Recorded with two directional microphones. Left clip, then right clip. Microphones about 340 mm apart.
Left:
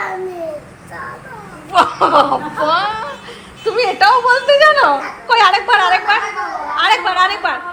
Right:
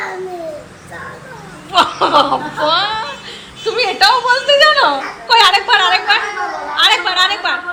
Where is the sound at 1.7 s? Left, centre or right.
Centre.